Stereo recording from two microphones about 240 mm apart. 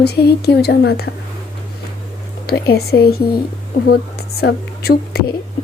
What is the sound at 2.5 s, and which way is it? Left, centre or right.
Speech, left.